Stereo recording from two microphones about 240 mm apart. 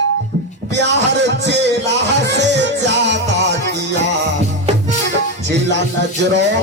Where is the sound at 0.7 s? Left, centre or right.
Right.